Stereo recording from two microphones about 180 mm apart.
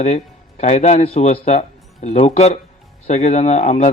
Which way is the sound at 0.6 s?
40° left (ahead or behind).